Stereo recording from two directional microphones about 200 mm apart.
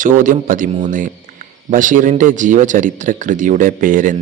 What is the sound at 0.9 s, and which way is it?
Speech, 40° right (ahead or behind).